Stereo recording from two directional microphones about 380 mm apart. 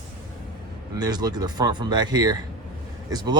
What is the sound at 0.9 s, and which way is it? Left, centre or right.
Speech, centre.